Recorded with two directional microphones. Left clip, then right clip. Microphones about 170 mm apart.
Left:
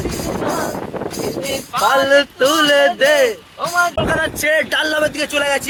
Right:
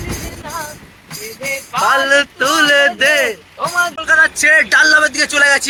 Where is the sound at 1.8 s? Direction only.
20° left (ahead or behind).